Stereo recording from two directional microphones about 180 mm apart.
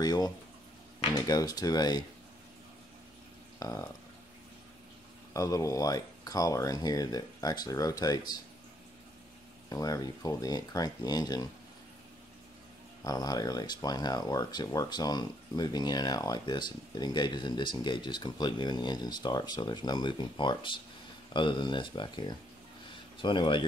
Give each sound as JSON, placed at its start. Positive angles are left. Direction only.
{"t": 0.0, "sound": "speech", "side_deg": 20}
{"t": 3.5, "sound": "speech", "side_deg": 20}
{"t": 5.3, "sound": "speech", "side_deg": 15}
{"t": 9.7, "sound": "speech", "side_deg": 20}
{"t": 13.0, "sound": "speech", "side_deg": 20}